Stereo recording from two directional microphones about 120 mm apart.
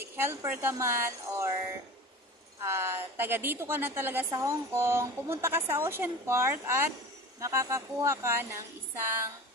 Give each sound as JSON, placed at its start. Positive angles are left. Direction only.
{"t": 0.0, "sound": "a woman's voice", "side_deg": -20}
{"t": 2.6, "sound": "a woman's voice", "side_deg": -20}